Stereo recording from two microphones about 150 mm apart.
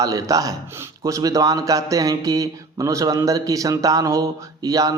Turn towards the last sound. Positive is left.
turn(degrees=-25)  # may be behind; listen again after turning